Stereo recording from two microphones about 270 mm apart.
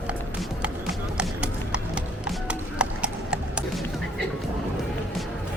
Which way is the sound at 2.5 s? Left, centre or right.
Centre.